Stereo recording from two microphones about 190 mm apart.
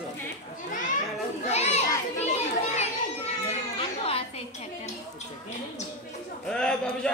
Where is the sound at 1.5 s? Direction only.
35° left (ahead or behind).